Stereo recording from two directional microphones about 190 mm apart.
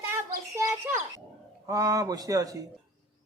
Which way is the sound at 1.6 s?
20° right (ahead or behind).